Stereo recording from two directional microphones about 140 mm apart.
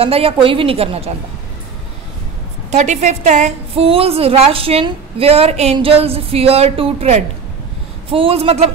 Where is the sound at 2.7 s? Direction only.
55° right (ahead or behind).